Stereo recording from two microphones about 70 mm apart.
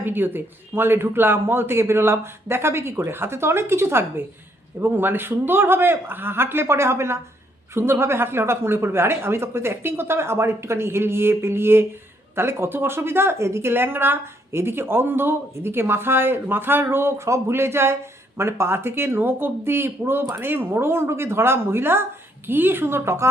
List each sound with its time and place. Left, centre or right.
0.0 s a woman's voice: right